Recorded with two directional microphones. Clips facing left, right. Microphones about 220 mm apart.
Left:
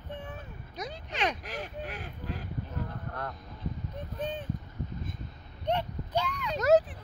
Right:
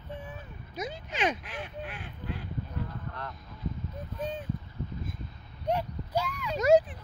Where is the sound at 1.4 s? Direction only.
40° left (ahead or behind).